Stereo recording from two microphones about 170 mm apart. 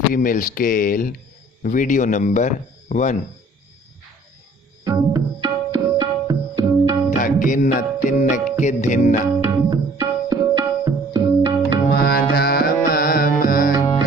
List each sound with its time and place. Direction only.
0.1 s speech: 55° left (ahead or behind)
4.8 s tabla: 20° right (ahead or behind)
7.2 s music: 50° left (ahead or behind)
9.6 s tabla: 20° right (ahead or behind)
11.9 s music: 70° left (ahead or behind)